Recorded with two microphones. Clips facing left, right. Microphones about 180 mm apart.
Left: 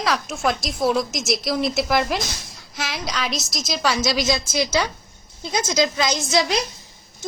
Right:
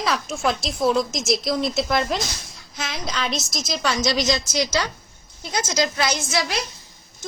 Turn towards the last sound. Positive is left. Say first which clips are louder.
# left 4 dB
turn(degrees=20)  # may be behind; listen again after turning